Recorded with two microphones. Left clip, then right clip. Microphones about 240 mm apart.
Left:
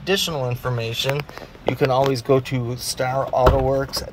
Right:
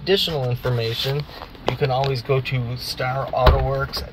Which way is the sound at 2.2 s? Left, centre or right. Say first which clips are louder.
Left 4 dB; left.